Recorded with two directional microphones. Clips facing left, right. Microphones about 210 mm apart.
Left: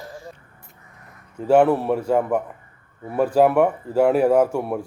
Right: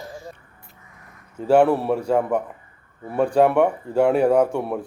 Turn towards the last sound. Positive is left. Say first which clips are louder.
# left 1 dB
turn(degrees=5)  # may be behind; listen again after turning